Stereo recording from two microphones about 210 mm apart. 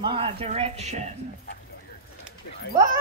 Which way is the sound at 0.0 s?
25° right (ahead or behind).